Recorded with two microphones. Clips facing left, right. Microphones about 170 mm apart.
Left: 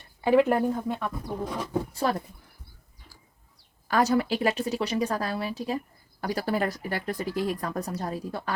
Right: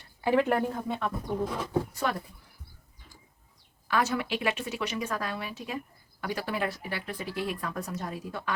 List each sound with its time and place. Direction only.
0.2 s speech: 15° left (ahead or behind)
0.4 s speech: 5° left (ahead or behind)
1.9 s speech: 30° left (ahead or behind)
3.8 s speech: 40° left (ahead or behind)